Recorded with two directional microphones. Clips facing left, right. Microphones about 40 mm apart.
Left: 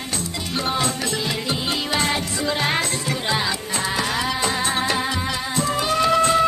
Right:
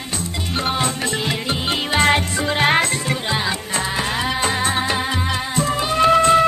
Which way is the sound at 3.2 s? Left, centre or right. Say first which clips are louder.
Left 2 dB; centre.